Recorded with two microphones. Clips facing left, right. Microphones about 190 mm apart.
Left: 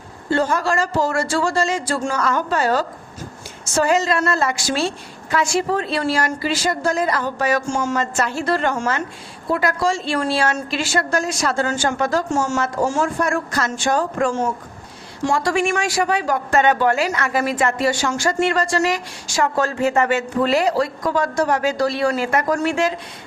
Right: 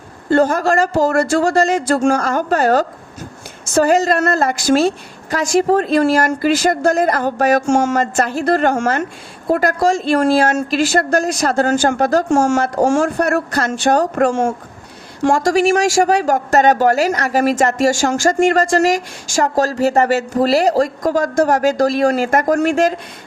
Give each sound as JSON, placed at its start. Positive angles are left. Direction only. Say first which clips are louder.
{"t": 0.3, "sound": "speech", "louder": "right 6 dB", "side_deg": -50}
{"t": 1.5, "sound": "speech", "louder": "right 6 dB", "side_deg": -60}
{"t": 2.1, "sound": "speech", "louder": "right 4 dB", "side_deg": -45}
{"t": 3.8, "sound": "speech", "louder": "right 3 dB", "side_deg": -45}
{"t": 7.7, "sound": "speech", "louder": "right 7 dB", "side_deg": -85}
{"t": 7.9, "sound": "speech", "louder": "right 5 dB", "side_deg": -55}
{"t": 12.5, "sound": "speech", "louder": "right 5 dB", "side_deg": -55}
{"t": 14.2, "sound": "a woman's voice", "louder": "right 5 dB", "side_deg": -80}
{"t": 15.2, "sound": "speech", "louder": "right 5 dB", "side_deg": -45}